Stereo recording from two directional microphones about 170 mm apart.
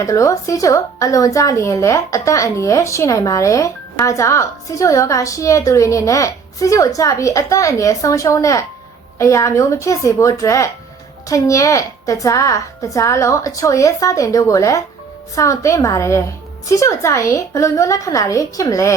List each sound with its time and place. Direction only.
0.0 s a woman's voice: 20° left (ahead or behind)